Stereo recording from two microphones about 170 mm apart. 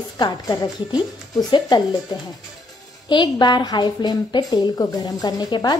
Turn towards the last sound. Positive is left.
turn(degrees=25)  # may be behind; listen again after turning